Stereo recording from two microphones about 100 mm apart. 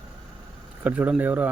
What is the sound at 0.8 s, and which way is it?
Speech, 15° right (ahead or behind).